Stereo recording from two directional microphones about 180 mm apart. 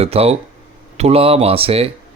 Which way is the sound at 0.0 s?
35° right (ahead or behind).